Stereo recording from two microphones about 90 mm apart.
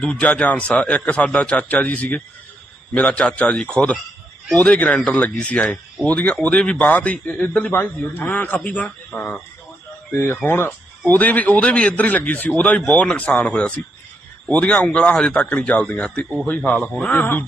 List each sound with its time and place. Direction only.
0.0 s a man's voice: 10° left (ahead or behind)
7.7 s a man's voice: 20° left (ahead or behind)